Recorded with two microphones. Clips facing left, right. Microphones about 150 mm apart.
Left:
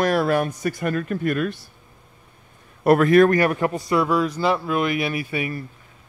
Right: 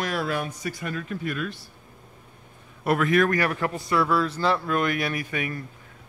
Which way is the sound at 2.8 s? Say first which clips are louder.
Left 7 dB; 45° left (ahead or behind).